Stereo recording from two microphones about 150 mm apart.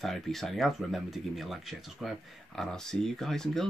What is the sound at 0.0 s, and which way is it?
Speech, centre (ahead or behind).